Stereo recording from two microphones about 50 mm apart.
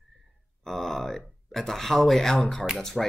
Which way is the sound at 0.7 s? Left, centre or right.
Centre.